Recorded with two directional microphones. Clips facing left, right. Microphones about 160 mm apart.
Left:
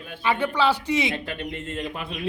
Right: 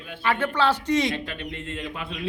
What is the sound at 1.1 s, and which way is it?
Speech, 45° left (ahead or behind).